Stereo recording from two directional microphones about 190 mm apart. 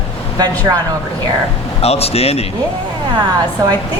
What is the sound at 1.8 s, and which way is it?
Speech, 30° left (ahead or behind).